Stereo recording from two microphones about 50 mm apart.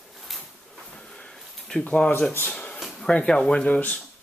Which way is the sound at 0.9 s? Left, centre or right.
Centre.